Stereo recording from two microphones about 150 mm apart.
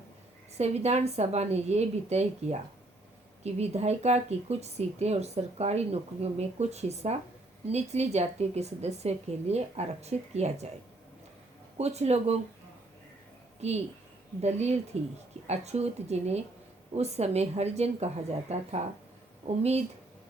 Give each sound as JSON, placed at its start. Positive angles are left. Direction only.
{"t": 0.5, "sound": "speech", "side_deg": -45}
{"t": 11.8, "sound": "speech", "side_deg": -45}
{"t": 14.4, "sound": "speech", "side_deg": -45}